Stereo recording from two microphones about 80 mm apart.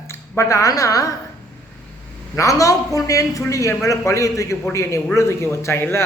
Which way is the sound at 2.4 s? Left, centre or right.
Left.